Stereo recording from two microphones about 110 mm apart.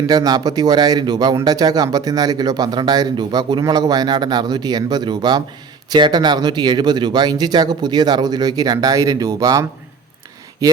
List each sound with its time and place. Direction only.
0.1 s speech: 35° right (ahead or behind)